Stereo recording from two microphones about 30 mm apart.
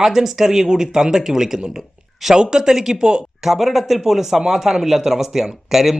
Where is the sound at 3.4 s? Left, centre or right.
Centre.